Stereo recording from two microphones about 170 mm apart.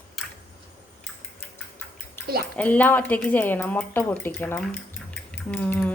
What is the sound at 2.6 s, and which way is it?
Speech, 10° left (ahead or behind).